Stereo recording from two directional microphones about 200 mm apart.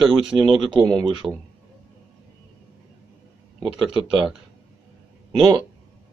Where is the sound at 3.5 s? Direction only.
5° right (ahead or behind).